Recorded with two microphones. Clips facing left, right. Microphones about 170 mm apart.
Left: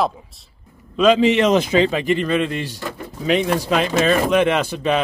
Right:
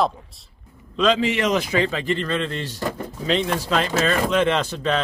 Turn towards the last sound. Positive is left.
turn(degrees=10)  # may be behind; listen again after turning